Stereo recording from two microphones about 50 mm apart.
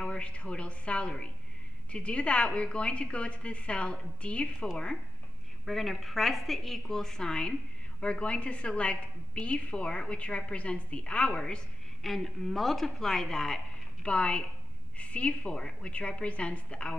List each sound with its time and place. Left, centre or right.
0.0 s a woman's voice: left
5.7 s a woman's voice: centre
12.0 s a woman's voice: centre
14.0 s a woman's voice: left